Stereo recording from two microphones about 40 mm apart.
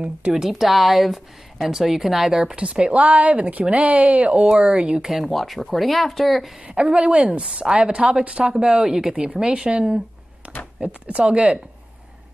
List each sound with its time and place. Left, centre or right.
0.5 s a woman's voice: centre
2.5 s a woman's voice: right
4.6 s speech: right
5.1 s a woman's voice: centre
6.6 s speech: right
7.4 s a woman's voice: centre